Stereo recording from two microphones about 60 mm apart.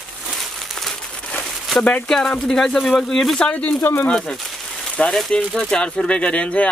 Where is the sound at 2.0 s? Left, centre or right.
Centre.